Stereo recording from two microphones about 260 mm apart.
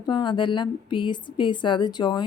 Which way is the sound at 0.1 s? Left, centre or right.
Centre.